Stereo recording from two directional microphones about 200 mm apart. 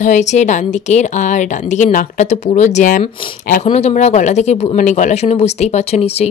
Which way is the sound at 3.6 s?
35° left (ahead or behind).